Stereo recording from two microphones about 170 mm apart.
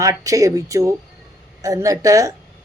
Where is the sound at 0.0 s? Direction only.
20° right (ahead or behind).